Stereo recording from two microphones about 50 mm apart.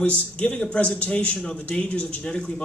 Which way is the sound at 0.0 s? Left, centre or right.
Left.